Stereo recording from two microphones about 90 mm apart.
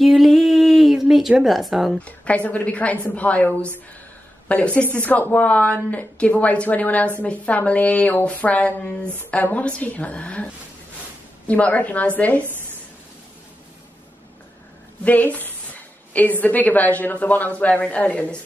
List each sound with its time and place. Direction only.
0.0 s a sound: centre (ahead or behind)
1.4 s a woman's voice: centre (ahead or behind)
2.0 s a woman's voice: 15° left (ahead or behind)
15.0 s a woman's voice: 20° left (ahead or behind)